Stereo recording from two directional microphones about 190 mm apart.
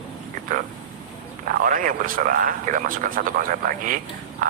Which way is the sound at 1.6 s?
45° right (ahead or behind).